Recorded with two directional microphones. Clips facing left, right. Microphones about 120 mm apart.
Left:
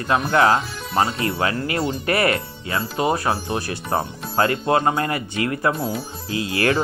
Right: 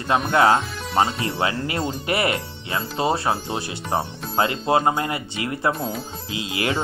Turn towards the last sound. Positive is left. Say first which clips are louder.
# left 4 dB
turn(degrees=-20)  # may be behind; listen again after turning